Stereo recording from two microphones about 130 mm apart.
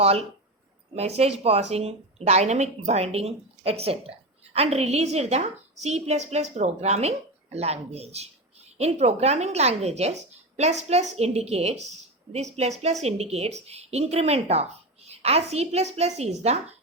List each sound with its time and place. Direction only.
0.0 s a woman's voice: 50° right (ahead or behind)